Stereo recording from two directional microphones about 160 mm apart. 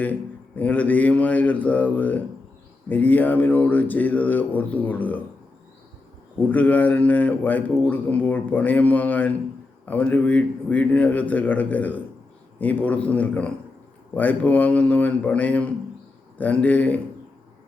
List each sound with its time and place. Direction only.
0.0 s a man's voice: 10° left (ahead or behind)
6.5 s a man's voice: 10° left (ahead or behind)